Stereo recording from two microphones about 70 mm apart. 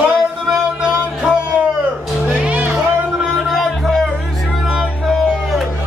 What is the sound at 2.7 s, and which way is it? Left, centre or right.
Music, centre.